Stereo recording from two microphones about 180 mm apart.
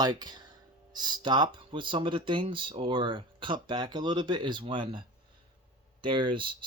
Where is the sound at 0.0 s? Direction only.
25° right (ahead or behind).